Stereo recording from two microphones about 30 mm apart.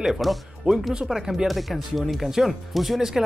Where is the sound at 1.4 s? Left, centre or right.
Centre.